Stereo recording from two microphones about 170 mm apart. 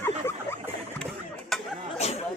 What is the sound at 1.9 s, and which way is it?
Chatter, 40° left (ahead or behind).